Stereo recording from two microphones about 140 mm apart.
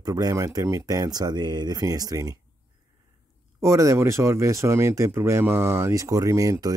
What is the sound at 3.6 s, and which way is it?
Speech, 20° right (ahead or behind).